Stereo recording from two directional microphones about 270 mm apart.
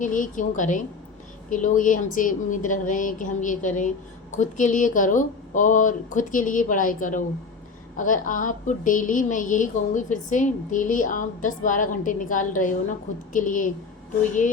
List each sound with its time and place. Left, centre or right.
0.0 s a woman's voice: left